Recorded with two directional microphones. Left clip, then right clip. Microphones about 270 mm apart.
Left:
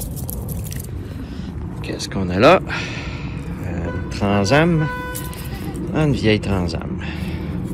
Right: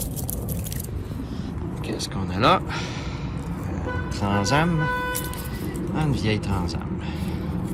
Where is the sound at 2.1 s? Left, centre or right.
Centre.